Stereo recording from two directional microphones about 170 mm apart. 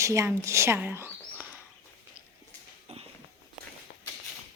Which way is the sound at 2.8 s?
35° right (ahead or behind).